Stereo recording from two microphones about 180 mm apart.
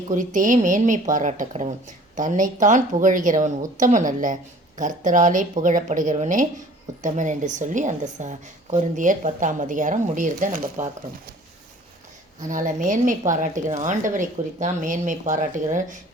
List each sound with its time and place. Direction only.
0.1 s a woman's voice: 45° right (ahead or behind)
12.5 s a woman's voice: 45° right (ahead or behind)